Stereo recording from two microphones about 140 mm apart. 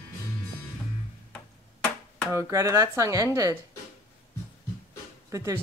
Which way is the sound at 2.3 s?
20° right (ahead or behind).